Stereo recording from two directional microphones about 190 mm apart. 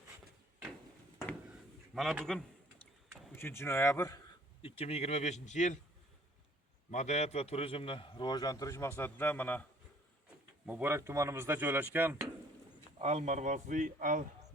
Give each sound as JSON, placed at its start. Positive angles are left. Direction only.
{"t": 2.0, "sound": "a man's voice", "side_deg": 0}
{"t": 3.3, "sound": "speech", "side_deg": 15}
{"t": 4.6, "sound": "a man's voice", "side_deg": 30}
{"t": 6.9, "sound": "a man's voice", "side_deg": 35}
{"t": 10.7, "sound": "speech", "side_deg": -10}
{"t": 13.0, "sound": "a man's voice", "side_deg": -35}